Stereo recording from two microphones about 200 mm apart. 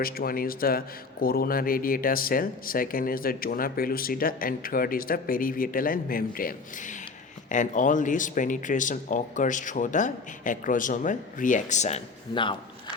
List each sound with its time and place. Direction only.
0.0 s a man's voice: 45° left (ahead or behind); by 12.5 s 25° left (ahead or behind)